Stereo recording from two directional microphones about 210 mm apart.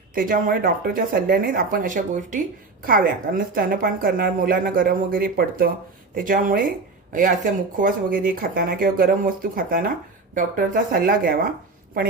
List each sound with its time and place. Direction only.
0.1 s a woman's voice: 40° right (ahead or behind)